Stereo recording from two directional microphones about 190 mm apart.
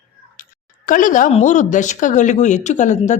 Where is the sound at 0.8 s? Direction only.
45° left (ahead or behind).